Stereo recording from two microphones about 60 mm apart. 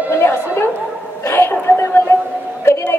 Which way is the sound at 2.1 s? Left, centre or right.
Left.